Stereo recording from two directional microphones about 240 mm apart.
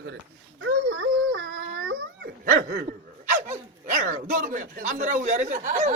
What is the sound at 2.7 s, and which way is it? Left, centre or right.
Speech, right.